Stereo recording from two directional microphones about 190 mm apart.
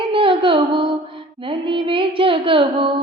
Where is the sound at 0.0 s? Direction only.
25° right (ahead or behind).